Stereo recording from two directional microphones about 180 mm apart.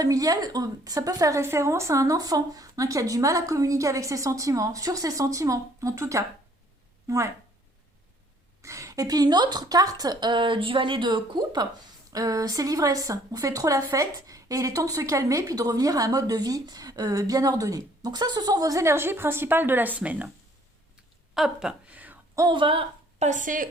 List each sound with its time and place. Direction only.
0.0 s a woman's voice: 20° right (ahead or behind)
8.6 s a woman's voice: 15° right (ahead or behind)
21.3 s a sound: 5° right (ahead or behind)
22.4 s a woman's voice: 25° right (ahead or behind); by 23.6 s 45° right (ahead or behind)